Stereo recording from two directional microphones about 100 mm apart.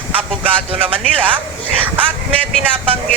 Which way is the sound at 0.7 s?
70° right (ahead or behind).